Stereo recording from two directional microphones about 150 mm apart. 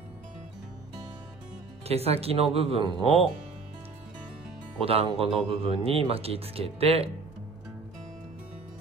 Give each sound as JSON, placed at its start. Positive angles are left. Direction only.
{"t": 1.9, "sound": "speech", "side_deg": -40}
{"t": 4.7, "sound": "speech", "side_deg": -40}